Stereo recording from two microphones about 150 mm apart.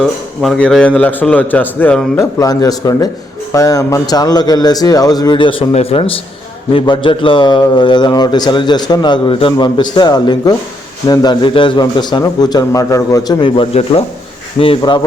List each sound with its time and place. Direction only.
0.0 s a man's voice: centre (ahead or behind)
2.1 s a man's voice: 25° left (ahead or behind)